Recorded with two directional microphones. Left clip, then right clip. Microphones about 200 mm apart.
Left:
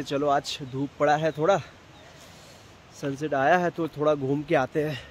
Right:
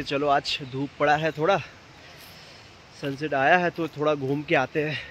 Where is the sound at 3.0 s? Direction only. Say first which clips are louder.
Right 1 dB; 5° left (ahead or behind).